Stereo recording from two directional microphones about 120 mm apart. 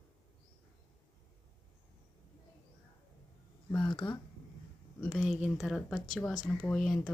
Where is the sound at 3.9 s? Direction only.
40° left (ahead or behind).